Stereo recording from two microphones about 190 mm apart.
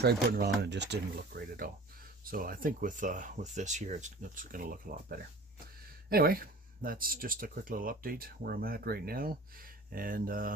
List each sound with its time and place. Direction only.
0.0 s speech: 55° right (ahead or behind)
2.2 s speech: 50° right (ahead or behind)